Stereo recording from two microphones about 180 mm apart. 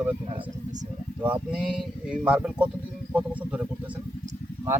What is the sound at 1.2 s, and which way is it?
Speech, 5° right (ahead or behind).